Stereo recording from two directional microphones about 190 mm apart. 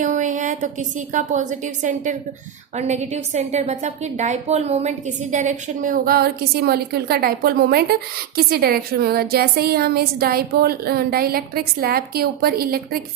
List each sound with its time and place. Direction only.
0.0 s a woman's voice: 40° right (ahead or behind)